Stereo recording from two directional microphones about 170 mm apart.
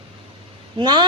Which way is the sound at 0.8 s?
30° right (ahead or behind).